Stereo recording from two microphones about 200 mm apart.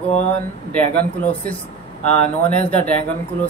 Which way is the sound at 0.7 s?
10° left (ahead or behind).